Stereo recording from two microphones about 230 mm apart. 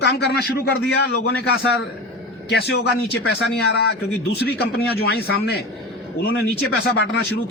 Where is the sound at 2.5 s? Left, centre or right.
Left.